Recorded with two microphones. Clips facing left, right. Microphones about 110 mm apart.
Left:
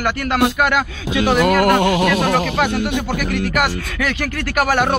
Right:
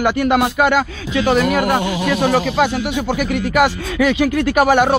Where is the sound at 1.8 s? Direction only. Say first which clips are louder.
Left 3 dB; 65° left (ahead or behind).